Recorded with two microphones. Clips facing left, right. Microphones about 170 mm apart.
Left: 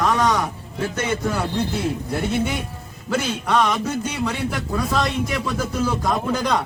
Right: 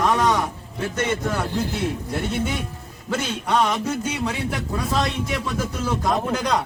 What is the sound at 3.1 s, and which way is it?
A man's voice, centre (ahead or behind).